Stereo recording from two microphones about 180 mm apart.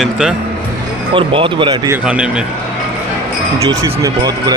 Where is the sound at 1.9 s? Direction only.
5° right (ahead or behind).